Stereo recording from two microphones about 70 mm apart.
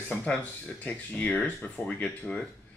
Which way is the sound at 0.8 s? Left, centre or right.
Left.